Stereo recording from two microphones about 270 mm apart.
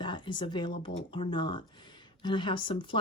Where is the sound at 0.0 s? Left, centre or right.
Centre.